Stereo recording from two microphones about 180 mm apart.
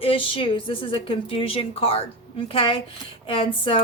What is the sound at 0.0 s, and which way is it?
A woman's voice, 30° left (ahead or behind).